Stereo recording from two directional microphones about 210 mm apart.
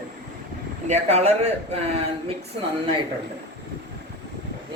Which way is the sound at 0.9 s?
30° right (ahead or behind).